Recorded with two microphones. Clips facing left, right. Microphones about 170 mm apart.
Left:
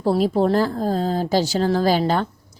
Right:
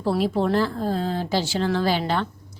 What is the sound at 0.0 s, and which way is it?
Speech, 40° left (ahead or behind).